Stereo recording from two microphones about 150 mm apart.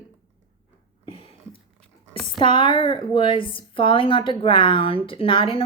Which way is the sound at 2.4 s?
35° left (ahead or behind).